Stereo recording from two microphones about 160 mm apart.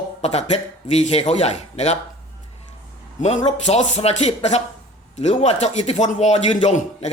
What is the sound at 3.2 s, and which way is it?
A man's voice, 45° left (ahead or behind).